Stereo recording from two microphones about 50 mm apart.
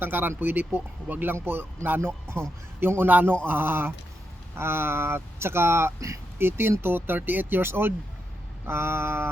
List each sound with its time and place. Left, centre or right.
0.0 s speech: right